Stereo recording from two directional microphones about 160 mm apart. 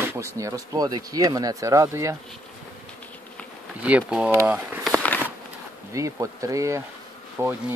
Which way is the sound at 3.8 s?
10° right (ahead or behind).